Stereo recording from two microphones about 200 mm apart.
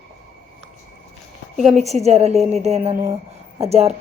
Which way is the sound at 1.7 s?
35° right (ahead or behind).